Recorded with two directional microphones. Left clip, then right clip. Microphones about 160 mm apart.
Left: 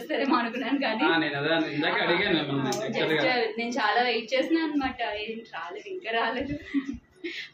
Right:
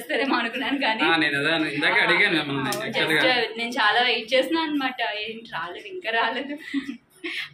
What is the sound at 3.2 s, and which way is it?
A woman's voice, centre (ahead or behind).